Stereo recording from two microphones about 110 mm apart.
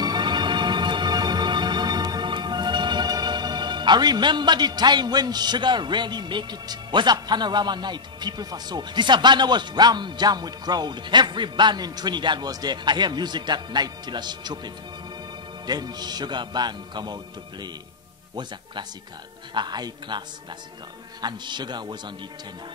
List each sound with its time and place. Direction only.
0.0 s music: 40° right (ahead or behind)
15.6 s a man's voice: 40° right (ahead or behind)